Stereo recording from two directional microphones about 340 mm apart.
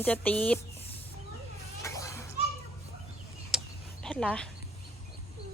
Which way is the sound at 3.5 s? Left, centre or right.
Centre.